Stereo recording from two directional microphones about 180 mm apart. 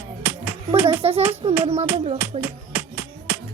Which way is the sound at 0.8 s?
30° right (ahead or behind).